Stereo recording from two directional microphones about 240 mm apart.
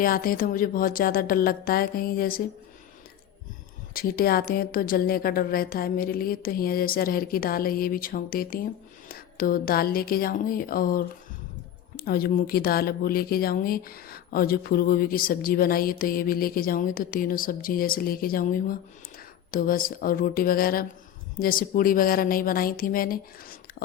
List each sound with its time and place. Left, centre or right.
0.0 s speech: left
3.9 s speech: left